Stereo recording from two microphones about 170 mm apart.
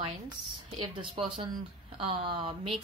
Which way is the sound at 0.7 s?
30° right (ahead or behind).